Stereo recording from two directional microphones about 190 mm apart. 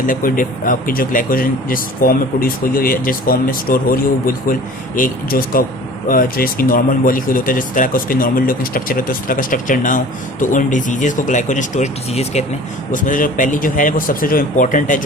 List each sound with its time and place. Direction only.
0.0 s speech: 45° left (ahead or behind)